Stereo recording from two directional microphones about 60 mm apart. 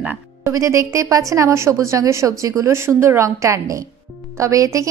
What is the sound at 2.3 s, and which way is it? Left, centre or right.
Speech, right.